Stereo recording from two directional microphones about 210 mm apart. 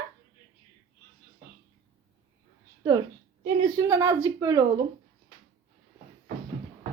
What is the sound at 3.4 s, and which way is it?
A woman's voice, 20° right (ahead or behind).